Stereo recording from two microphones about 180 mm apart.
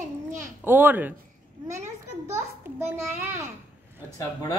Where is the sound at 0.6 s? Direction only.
10° right (ahead or behind).